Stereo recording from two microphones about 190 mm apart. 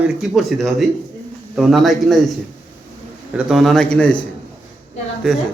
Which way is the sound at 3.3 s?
Centre (ahead or behind).